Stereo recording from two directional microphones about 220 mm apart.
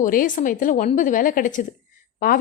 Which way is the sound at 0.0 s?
40° left (ahead or behind).